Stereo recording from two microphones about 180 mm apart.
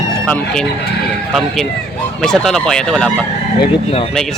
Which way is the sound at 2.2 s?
Centre (ahead or behind).